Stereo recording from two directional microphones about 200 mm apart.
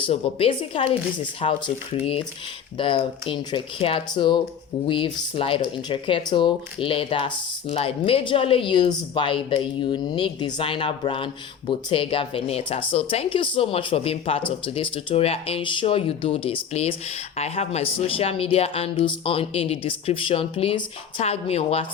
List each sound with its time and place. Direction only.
0.0 s speech: 30° left (ahead or behind)